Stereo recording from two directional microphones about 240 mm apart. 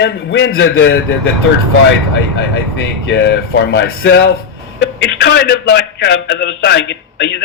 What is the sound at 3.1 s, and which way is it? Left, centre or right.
A man's voice, left.